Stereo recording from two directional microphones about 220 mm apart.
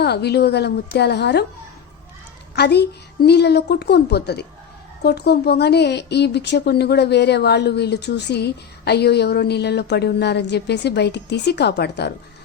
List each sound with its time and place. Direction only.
0.0 s speech: 50° left (ahead or behind)
2.6 s speech: 50° left (ahead or behind)